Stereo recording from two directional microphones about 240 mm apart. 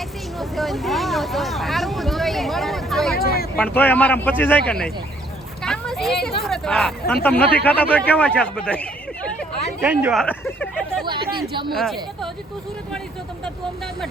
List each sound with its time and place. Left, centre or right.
0.3 s vehicle: centre
3.2 s a sound: left
3.6 s speech: centre
5.6 s a sound: centre
6.4 s speech: centre
11.0 s speech: centre
11.7 s speech: centre